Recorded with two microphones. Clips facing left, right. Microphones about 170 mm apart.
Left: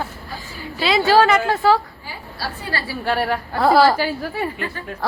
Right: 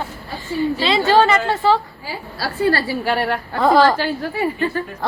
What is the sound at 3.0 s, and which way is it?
Speech, centre (ahead or behind).